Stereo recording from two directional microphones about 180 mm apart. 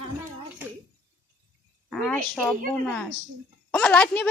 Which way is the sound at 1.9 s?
5° left (ahead or behind).